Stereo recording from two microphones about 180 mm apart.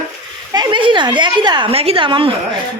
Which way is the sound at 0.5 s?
25° right (ahead or behind).